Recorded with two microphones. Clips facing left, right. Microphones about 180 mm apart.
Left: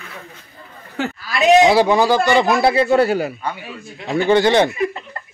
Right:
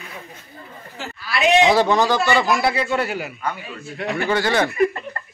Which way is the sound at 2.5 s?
25° left (ahead or behind).